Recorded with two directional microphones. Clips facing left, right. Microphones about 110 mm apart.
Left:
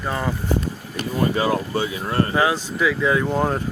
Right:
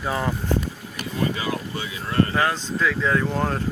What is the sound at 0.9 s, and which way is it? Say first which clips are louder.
Speech: left 5 dB; 40° left (ahead or behind).